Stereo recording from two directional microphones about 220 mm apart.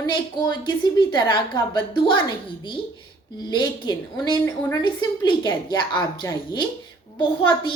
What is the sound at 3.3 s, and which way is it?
A woman's voice, 20° left (ahead or behind).